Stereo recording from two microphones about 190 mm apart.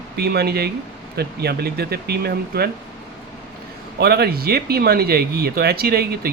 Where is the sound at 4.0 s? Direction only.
55° right (ahead or behind).